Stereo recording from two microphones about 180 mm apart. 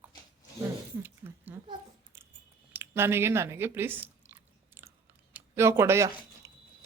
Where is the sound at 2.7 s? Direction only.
15° right (ahead or behind).